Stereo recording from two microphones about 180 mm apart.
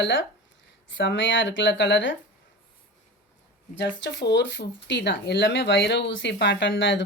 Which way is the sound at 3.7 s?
80° left.